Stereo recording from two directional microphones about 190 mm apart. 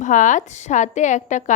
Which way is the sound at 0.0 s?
40° left (ahead or behind).